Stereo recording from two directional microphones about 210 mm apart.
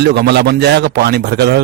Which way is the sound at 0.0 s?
50° right (ahead or behind).